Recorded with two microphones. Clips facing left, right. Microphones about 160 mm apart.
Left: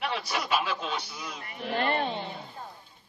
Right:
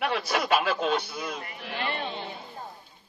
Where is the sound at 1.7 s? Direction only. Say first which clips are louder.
Left 5 dB; 45° left (ahead or behind).